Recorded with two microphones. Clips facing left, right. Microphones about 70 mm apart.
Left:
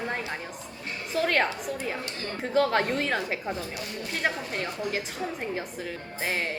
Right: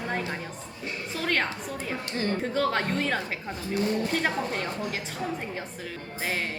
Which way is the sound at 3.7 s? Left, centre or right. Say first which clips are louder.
Right 9 dB; right.